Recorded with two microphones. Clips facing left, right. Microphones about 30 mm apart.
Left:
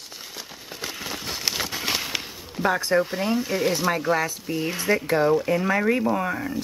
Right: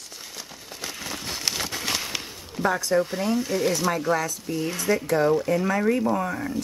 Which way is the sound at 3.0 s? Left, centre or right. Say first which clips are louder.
Left 1 dB; centre.